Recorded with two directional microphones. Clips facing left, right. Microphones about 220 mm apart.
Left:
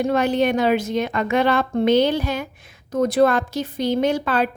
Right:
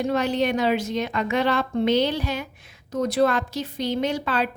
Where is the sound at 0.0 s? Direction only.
50° left (ahead or behind).